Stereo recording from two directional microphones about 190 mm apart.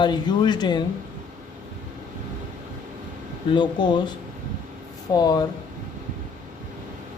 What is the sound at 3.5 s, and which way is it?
Speech, 25° left (ahead or behind).